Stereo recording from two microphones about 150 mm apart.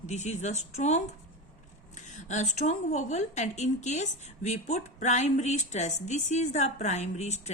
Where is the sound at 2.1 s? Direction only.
50° left (ahead or behind).